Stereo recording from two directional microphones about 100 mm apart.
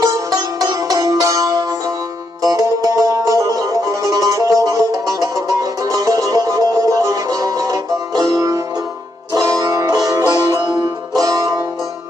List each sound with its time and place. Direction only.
0.0 s music: 35° right (ahead or behind)
11.2 s music: 35° right (ahead or behind)